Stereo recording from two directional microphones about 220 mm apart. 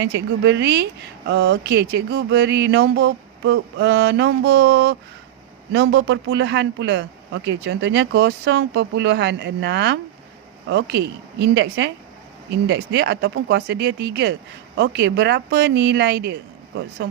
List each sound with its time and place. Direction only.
0.0 s a man's voice: 55° right (ahead or behind)